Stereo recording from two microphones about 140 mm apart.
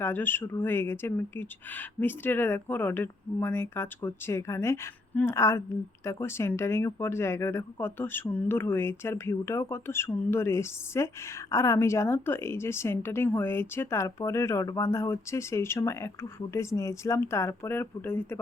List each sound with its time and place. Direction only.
0.0 s a woman's voice: 15° left (ahead or behind)